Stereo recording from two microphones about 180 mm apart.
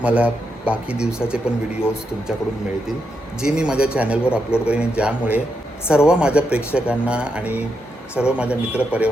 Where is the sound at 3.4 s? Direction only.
5° right (ahead or behind).